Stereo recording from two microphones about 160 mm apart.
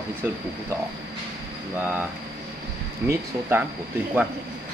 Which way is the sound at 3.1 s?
15° right (ahead or behind).